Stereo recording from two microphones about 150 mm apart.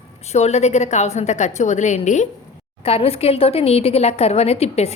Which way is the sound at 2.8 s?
40° left (ahead or behind).